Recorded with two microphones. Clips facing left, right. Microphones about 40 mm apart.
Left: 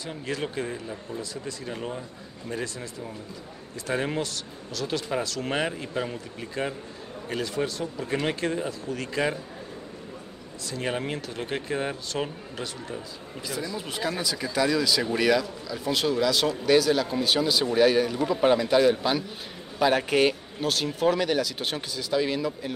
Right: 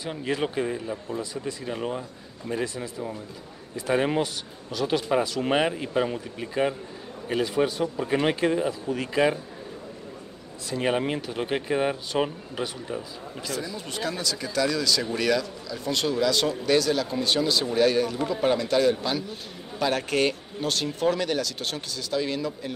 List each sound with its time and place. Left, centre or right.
0.0 s speech: centre
10.7 s speech: centre
13.5 s speech: centre